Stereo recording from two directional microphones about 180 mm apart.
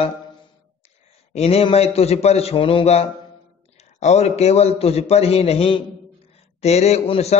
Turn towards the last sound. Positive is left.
turn(degrees=35)  # may be behind; listen again after turning